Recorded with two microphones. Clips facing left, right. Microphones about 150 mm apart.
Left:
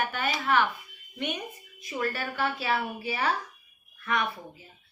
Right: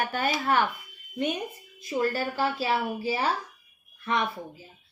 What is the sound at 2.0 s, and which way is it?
A woman's voice, 30° right (ahead or behind).